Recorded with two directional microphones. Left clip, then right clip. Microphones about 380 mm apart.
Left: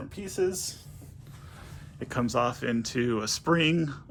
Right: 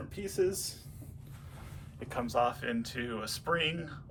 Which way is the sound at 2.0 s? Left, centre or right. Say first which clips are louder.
Left 3 dB; left.